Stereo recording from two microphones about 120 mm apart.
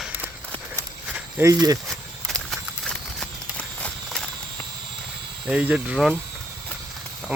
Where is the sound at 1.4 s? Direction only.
30° right (ahead or behind).